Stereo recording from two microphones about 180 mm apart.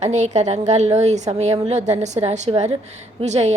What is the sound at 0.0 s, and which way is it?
A woman's voice, 40° right (ahead or behind).